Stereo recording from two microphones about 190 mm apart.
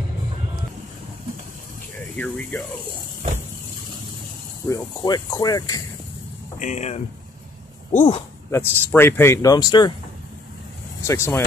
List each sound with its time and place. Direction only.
2.1 s speech: 5° left (ahead or behind)
4.6 s speech: 20° left (ahead or behind)
6.6 s speech: 40° left (ahead or behind)
8.5 s speech: 10° left (ahead or behind)
11.1 s speech: 15° left (ahead or behind)